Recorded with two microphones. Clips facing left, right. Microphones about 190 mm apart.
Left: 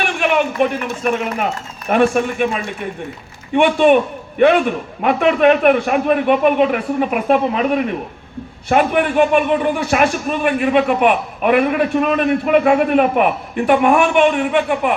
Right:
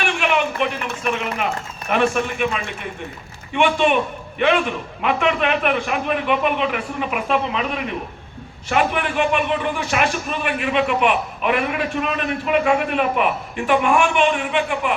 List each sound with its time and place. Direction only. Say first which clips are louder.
0.0 s a woman's voice: left 3 dB; 50° left (ahead or behind)